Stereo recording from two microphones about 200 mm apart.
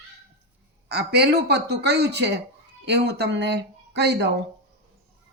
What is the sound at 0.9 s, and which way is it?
Speech, 55° right (ahead or behind).